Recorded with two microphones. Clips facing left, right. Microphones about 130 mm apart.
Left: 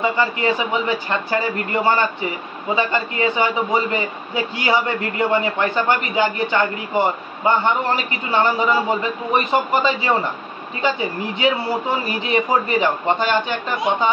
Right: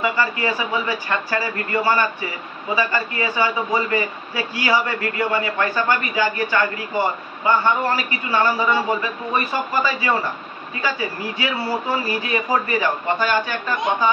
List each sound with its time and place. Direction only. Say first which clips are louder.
0.0 s speech: left 2 dB; 20° left (ahead or behind)